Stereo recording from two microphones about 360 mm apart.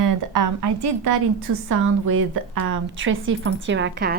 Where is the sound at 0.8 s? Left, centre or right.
Right.